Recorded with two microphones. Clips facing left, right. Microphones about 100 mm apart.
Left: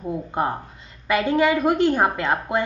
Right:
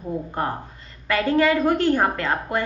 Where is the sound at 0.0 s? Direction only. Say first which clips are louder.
Left 2 dB; 15° left (ahead or behind).